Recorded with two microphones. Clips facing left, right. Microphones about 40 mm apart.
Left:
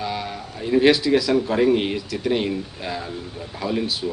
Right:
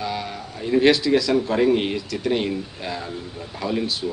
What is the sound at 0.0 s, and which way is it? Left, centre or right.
Speech, centre.